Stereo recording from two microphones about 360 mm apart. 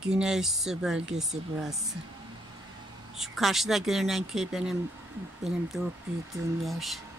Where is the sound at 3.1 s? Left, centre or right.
Centre.